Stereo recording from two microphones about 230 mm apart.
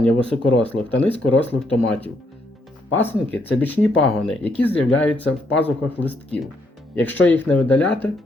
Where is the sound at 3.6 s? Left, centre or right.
Centre.